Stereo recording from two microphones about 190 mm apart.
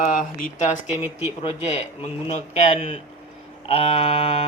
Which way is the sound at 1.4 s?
35° left (ahead or behind).